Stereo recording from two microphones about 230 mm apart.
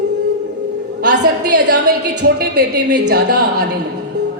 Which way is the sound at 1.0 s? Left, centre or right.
Right.